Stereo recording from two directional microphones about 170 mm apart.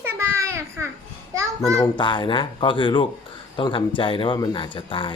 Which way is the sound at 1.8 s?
30° left (ahead or behind).